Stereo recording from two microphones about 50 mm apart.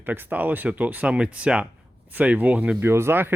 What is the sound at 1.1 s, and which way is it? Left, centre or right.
Speech, right.